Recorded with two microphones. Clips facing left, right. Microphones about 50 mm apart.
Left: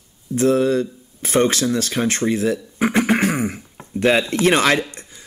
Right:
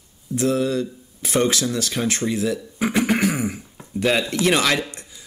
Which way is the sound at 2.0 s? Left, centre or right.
Centre.